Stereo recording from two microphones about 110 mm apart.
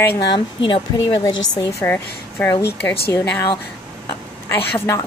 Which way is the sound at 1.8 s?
15° left (ahead or behind).